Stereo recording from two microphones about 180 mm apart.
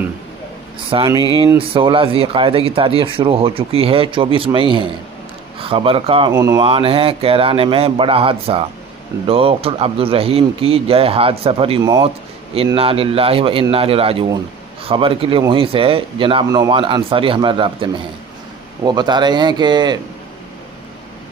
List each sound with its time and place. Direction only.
0.8 s speech: 30° right (ahead or behind)
6.3 s speech: 20° right (ahead or behind)
6.6 s speech: 30° right (ahead or behind)
18.9 s speech: 25° right (ahead or behind)